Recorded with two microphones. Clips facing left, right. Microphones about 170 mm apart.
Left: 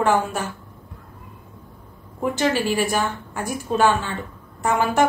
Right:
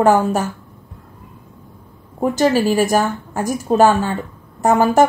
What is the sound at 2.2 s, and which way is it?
Speech, 40° right (ahead or behind).